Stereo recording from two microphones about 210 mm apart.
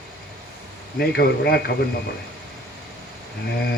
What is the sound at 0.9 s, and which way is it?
Speech, 50° left (ahead or behind).